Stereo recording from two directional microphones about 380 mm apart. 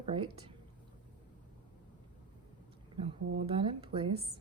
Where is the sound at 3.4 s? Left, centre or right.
Centre.